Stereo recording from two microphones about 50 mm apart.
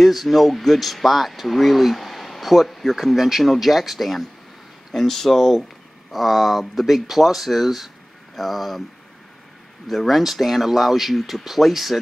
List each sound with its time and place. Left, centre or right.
0.0 s speech: centre
9.8 s speech: centre